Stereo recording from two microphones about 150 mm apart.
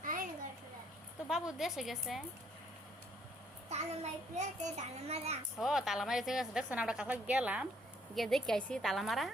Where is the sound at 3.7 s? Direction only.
50° right (ahead or behind).